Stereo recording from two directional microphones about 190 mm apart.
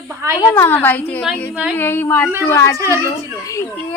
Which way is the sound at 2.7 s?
15° right (ahead or behind).